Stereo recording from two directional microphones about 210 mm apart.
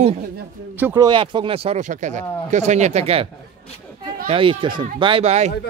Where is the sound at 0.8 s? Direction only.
10° right (ahead or behind).